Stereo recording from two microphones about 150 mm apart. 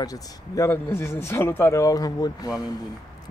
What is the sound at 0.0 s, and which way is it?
Speech, 20° left (ahead or behind).